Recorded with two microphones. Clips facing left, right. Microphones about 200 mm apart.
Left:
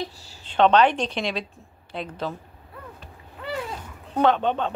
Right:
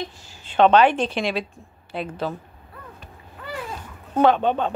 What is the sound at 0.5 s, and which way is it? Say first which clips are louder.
Speech: right 2 dB; 5° right (ahead or behind).